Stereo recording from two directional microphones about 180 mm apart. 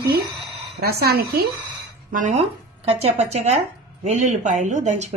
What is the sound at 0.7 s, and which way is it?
Speech, 60° right (ahead or behind).